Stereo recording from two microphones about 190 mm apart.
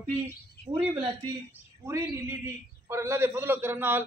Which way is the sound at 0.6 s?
60° left (ahead or behind).